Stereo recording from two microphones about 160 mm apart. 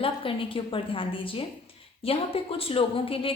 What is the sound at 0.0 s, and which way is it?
A woman's voice, 35° left (ahead or behind).